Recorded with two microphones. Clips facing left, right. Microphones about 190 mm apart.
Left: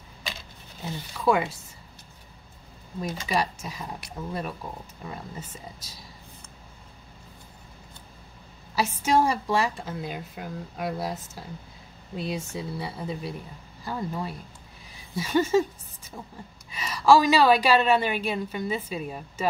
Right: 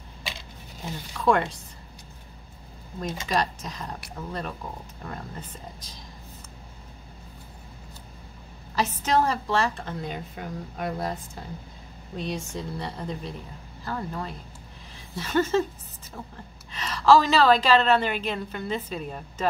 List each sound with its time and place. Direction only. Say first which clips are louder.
0.9 s a woman's voice: right 1 dB; 10° left (ahead or behind)
3.3 s a woman's voice: right 1 dB; 10° left (ahead or behind)
8.7 s a woman's voice: left 1 dB; 10° left (ahead or behind)
16.7 s a woman's voice: even; 10° left (ahead or behind)